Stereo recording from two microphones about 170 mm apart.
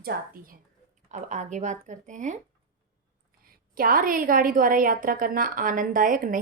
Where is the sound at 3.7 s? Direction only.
55° right (ahead or behind).